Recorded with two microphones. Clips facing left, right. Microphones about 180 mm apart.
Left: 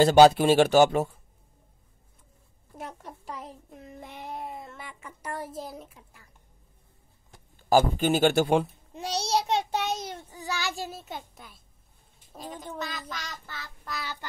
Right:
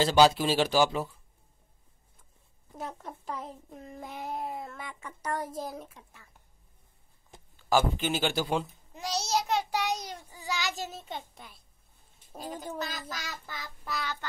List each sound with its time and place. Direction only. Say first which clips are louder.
0.0 s speech: left 6 dB; 50° left (ahead or behind)
4.0 s a sound: right 3 dB; 45° right (ahead or behind)
4.3 s speech: right 1 dB; centre (ahead or behind)
7.5 s speech: left 4 dB; 45° left (ahead or behind)
8.3 s speech: left 7 dB; 70° left (ahead or behind)
9.3 s child singing: left 3 dB; 25° left (ahead or behind)
10.3 s child singing: left 1 dB; 15° right (ahead or behind)
10.9 s speech: left 1 dB; 5° left (ahead or behind); by 13.7 s 10° right (ahead or behind)
13.8 s speech: right 2 dB; centre (ahead or behind)